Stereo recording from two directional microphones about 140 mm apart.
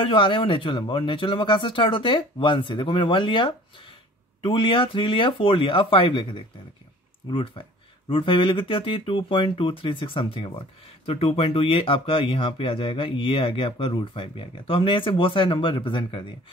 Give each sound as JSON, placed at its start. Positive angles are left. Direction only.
{"t": 0.0, "sound": "speech", "side_deg": 35}